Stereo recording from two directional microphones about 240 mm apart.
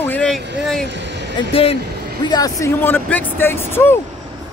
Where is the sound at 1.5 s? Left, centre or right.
Left.